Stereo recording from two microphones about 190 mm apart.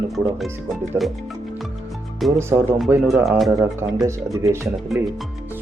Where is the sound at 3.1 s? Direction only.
Centre (ahead or behind).